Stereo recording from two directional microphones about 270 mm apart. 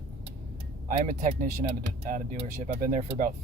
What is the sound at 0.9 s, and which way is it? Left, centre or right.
Speech, right.